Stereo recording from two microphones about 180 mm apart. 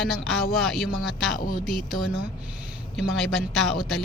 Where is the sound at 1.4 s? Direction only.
50° left (ahead or behind).